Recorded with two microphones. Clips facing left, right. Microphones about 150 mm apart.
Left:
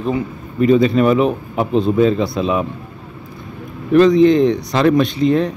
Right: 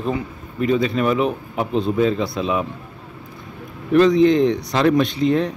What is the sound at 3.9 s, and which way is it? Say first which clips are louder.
Speech: left 3 dB; 45° left (ahead or behind).